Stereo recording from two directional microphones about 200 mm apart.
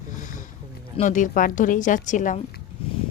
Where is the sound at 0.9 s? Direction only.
40° left (ahead or behind).